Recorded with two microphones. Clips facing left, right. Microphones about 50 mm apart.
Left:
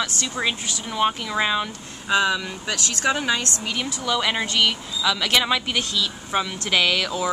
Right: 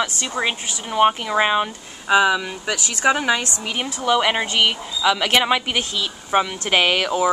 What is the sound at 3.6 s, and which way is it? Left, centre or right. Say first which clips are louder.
A woman's voice: right 3 dB; right.